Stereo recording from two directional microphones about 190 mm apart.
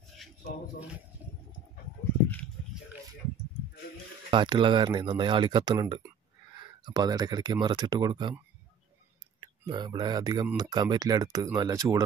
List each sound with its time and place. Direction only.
4.3 s speech: 25° right (ahead or behind)
9.4 s speech: 20° right (ahead or behind)